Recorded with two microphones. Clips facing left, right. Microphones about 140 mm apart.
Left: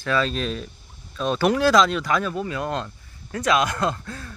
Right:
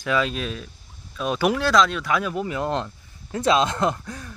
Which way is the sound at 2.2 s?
15° right (ahead or behind).